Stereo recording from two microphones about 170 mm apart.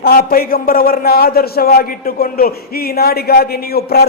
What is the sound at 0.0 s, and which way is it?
A man's voice, 60° left (ahead or behind).